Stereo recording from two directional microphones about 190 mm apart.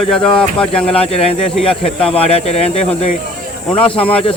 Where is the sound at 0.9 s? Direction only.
30° left (ahead or behind).